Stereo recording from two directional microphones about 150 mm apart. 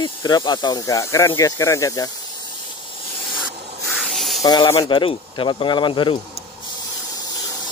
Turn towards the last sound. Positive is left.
turn(degrees=35)  # may be behind; listen again after turning